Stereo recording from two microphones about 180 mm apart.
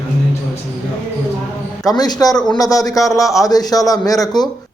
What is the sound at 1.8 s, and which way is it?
A man's voice, 20° left (ahead or behind).